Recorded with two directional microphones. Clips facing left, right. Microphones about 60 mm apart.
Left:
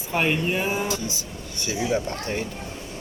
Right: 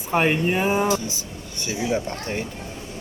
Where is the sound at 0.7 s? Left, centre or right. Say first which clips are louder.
Right 5 dB; right.